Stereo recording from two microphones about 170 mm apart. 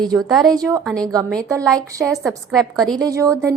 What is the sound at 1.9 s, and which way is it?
Speech, 20° right (ahead or behind).